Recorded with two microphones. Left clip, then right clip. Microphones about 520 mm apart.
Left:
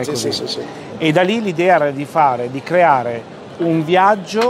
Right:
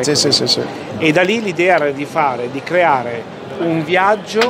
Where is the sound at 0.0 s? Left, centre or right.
Right.